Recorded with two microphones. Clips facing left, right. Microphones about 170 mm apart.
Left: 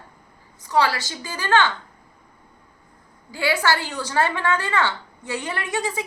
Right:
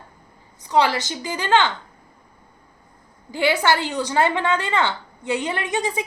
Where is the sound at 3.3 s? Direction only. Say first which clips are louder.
Right 3 dB; 20° right (ahead or behind).